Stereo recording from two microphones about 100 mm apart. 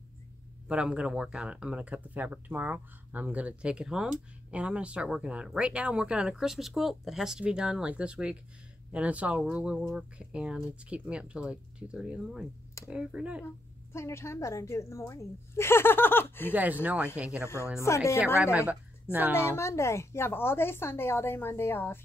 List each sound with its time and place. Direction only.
0.7 s speech: 10° right (ahead or behind)
13.9 s speech: 30° left (ahead or behind)
16.5 s speech: 15° right (ahead or behind)
17.4 s speech: 25° left (ahead or behind)
18.4 s speech: 15° right (ahead or behind)
19.3 s speech: 25° left (ahead or behind)